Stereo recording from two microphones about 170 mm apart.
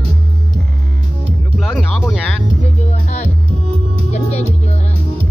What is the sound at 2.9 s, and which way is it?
Music, 45° left (ahead or behind).